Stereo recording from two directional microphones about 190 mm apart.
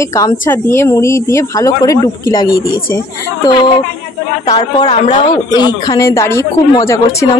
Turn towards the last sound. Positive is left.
turn(degrees=15)  # may be behind; listen again after turning